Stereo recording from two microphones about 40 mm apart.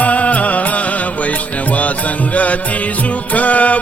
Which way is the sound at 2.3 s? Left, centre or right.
Left.